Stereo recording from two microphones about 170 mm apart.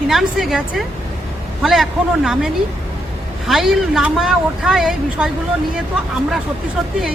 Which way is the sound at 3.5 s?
Centre (ahead or behind).